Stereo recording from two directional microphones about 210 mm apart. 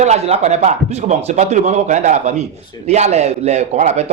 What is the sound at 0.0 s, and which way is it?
Speech, 35° right (ahead or behind).